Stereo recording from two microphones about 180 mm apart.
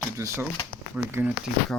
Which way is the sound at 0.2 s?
15° right (ahead or behind).